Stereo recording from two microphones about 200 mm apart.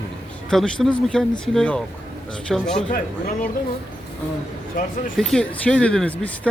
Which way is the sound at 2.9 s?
45° left (ahead or behind).